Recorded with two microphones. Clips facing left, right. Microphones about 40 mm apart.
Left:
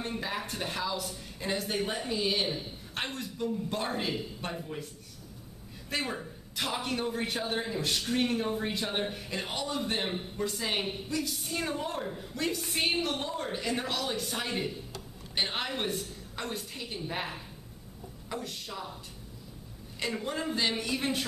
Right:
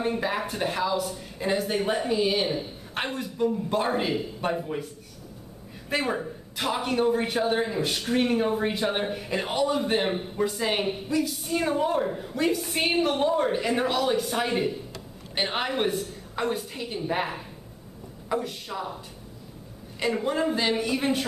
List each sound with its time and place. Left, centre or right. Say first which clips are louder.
0.0 s a woman's voice: right 8 dB; centre
5.9 s a woman's voice: right 7 dB; centre
20.0 s a woman's voice: right 8 dB; centre